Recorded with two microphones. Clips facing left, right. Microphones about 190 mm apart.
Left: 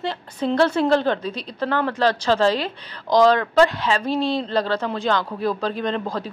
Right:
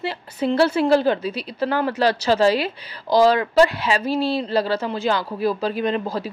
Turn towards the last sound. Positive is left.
turn(degrees=-5)  # may be behind; listen again after turning